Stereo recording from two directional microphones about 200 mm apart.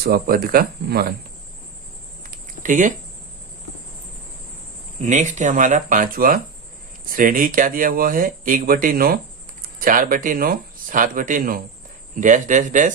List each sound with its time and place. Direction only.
0.0 s speech: 50° right (ahead or behind)
2.3 s a sound: 40° right (ahead or behind)
5.0 s speech: 35° right (ahead or behind)